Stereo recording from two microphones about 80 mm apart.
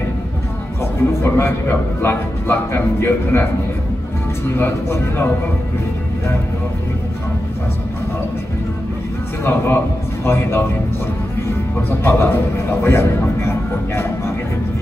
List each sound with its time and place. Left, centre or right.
1.2 s a man's voice: left
4.6 s a man's voice: left
9.4 s a man's voice: left
12.0 s a man's voice: left